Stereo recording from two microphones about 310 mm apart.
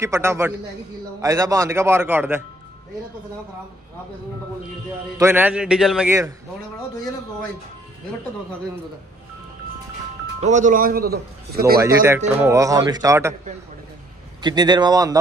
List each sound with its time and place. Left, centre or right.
0.0 s speech: centre
5.1 s speech: centre
10.4 s a man's voice: right
11.8 s speech: centre
14.4 s speech: centre